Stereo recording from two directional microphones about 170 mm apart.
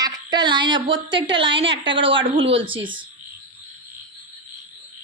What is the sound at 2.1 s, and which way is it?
Speech, 30° right (ahead or behind).